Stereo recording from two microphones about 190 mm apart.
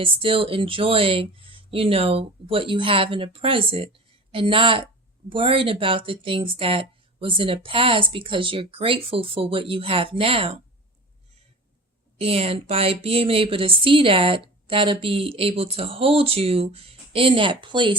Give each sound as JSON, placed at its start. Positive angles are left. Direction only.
{"t": 0.0, "sound": "speech", "side_deg": -30}
{"t": 12.2, "sound": "speech", "side_deg": -30}